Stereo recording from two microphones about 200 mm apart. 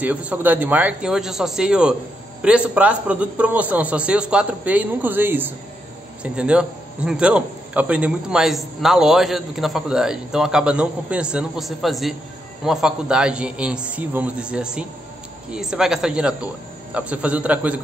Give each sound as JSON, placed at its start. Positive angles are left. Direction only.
{"t": 0.0, "sound": "a man's voice", "side_deg": -5}